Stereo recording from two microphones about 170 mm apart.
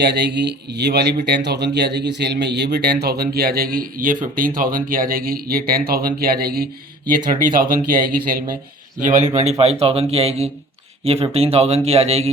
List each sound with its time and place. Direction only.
0.0 s speech: 85° right; by 6.7 s 65° right (ahead or behind)
7.3 s speech: 55° right (ahead or behind)
9.0 s speech: 45° right (ahead or behind)